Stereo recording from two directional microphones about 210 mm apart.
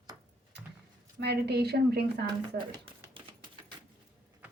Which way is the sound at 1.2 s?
50° right (ahead or behind).